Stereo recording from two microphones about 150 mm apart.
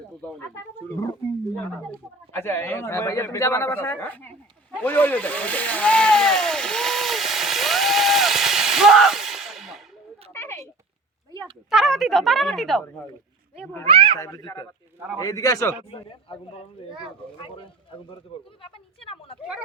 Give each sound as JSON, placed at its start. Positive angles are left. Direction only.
{"t": 2.3, "sound": "a man's voice", "side_deg": 15}
{"t": 4.8, "sound": "vehicle", "side_deg": 10}
{"t": 10.3, "sound": "a sound", "side_deg": 15}
{"t": 11.7, "sound": "speech", "side_deg": 0}
{"t": 13.8, "sound": "speech", "side_deg": -35}
{"t": 14.2, "sound": "speech", "side_deg": 25}
{"t": 15.9, "sound": "a woman's voice", "side_deg": 35}